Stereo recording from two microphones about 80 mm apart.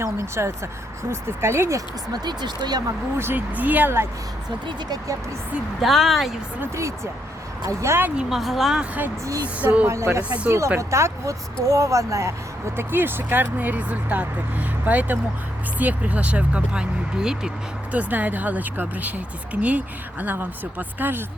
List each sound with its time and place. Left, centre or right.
0.0 s speech: right
2.1 s speech: right
3.2 s speech: right
5.8 s speech: centre
6.7 s speech: right
8.1 s speech: centre
8.4 s speech: centre
8.8 s speech: right
9.8 s speech: right
10.2 s speech: centre
10.8 s speech: right
12.7 s speech: right; by 17.5 s centre
17.9 s speech: right